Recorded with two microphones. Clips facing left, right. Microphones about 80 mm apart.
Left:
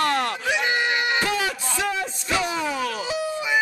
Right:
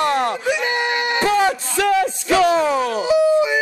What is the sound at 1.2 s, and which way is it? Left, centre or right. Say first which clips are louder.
Speech: right 8 dB; right.